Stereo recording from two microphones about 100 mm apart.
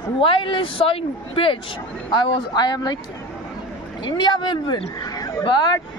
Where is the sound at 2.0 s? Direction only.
55° left (ahead or behind).